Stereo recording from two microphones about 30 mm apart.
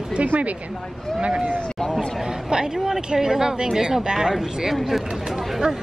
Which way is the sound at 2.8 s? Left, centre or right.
Centre.